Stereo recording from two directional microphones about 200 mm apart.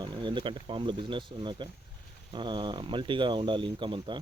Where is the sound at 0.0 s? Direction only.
25° right (ahead or behind).